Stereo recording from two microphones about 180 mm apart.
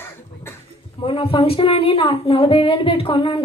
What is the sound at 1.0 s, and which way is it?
A woman's voice, 30° left (ahead or behind).